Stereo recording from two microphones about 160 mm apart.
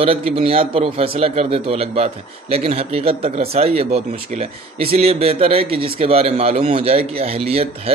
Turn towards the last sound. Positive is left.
turn(degrees=-40)  # may be behind; listen again after turning